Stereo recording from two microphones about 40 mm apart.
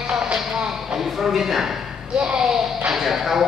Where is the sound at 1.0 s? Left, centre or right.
Centre.